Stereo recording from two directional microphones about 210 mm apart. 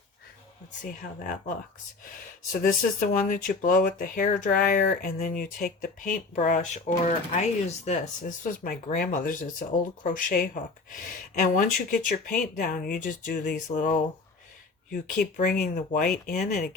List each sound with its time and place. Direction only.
2.5 s speech: 40° left (ahead or behind)